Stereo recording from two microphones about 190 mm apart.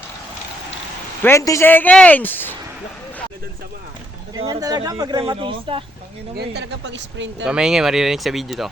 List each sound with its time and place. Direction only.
1.2 s speech: 15° left (ahead or behind)
4.4 s speech: 20° right (ahead or behind)
6.3 s speech: 60° right (ahead or behind)
7.4 s speech: 5° right (ahead or behind)